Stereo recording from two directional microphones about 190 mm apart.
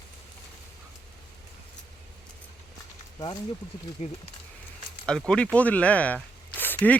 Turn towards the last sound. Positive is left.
turn(degrees=10)  # may be behind; listen again after turning